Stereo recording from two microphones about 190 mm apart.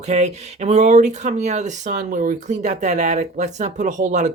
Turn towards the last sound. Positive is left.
turn(degrees=-40)  # may be behind; listen again after turning